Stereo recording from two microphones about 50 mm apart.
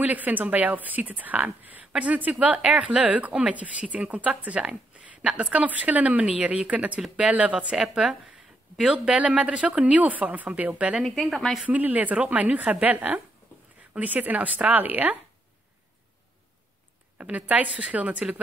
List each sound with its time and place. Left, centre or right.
0.0 s a woman's voice: right
4.9 s a sound: right
5.5 s a woman's voice: right
7.7 s a woman's voice: centre
8.9 s a woman's voice: right
11.0 s a woman's voice: centre
11.6 s a woman's voice: right
17.2 s a woman's voice: right